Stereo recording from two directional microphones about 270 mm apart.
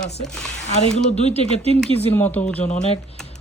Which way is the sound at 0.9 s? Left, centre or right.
Left.